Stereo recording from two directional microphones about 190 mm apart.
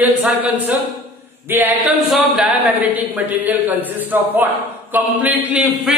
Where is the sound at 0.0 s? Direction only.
10° right (ahead or behind).